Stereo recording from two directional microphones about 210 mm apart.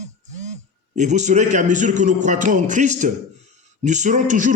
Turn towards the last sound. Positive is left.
turn(degrees=-35)  # may be behind; listen again after turning